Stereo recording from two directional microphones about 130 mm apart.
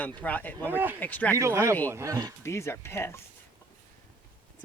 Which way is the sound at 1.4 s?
20° right (ahead or behind).